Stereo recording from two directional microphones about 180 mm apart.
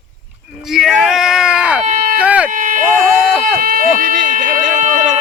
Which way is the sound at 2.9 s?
5° right (ahead or behind).